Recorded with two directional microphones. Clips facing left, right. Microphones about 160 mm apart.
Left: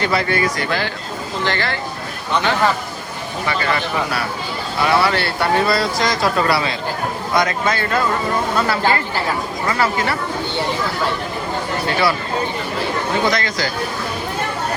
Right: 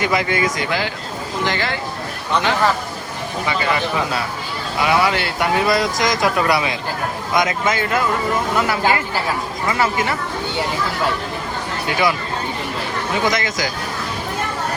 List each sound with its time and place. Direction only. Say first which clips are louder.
0.0 s speech: even; 15° right (ahead or behind)
3.4 s speech: even; 15° right (ahead or behind)
11.9 s speech: even; 15° right (ahead or behind)
13.2 s speech: left 1 dB; 20° right (ahead or behind)